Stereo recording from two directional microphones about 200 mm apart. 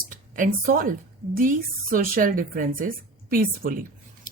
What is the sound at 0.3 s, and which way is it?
Speech, 45° right (ahead or behind).